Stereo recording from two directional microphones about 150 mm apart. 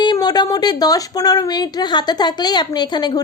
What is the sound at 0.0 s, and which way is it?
Speech, 30° left (ahead or behind).